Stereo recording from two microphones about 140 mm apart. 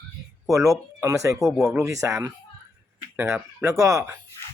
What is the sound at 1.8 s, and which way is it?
A man's voice, 20° right (ahead or behind).